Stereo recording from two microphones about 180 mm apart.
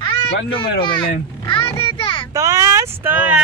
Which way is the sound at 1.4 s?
30° left (ahead or behind).